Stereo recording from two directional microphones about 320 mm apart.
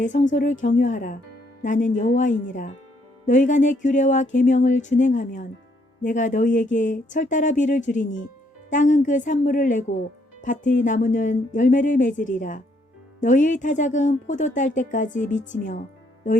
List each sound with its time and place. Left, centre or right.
0.0 s a woman's voice: left